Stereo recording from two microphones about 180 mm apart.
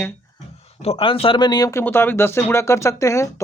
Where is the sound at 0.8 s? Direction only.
30° left (ahead or behind).